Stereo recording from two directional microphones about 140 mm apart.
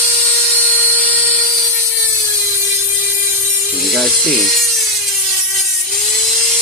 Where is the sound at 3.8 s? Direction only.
Centre (ahead or behind).